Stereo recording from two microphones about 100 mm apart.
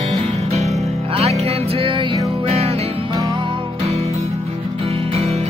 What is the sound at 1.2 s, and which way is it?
Music, 90° right.